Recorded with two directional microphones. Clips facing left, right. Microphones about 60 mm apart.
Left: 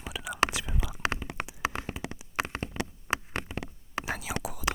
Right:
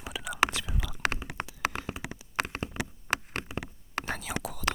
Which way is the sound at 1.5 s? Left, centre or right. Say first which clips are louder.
Right 1 dB; centre.